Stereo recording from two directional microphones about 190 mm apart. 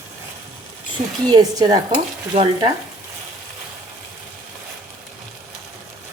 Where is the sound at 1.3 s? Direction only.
20° right (ahead or behind).